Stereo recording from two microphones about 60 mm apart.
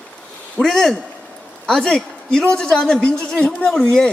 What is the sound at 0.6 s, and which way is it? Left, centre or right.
A man's voice, centre.